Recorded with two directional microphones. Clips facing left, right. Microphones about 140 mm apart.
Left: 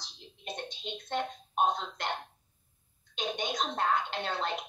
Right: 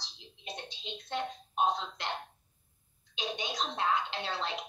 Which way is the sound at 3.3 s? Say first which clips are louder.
Left 3 dB; 50° left (ahead or behind).